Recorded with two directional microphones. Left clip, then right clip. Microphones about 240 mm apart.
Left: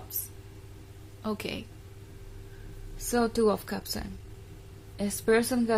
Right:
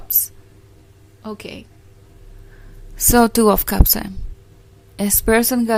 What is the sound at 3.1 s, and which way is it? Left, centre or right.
A woman's voice, right.